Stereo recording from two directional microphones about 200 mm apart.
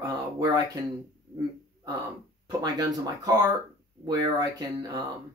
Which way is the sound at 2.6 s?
20° right (ahead or behind).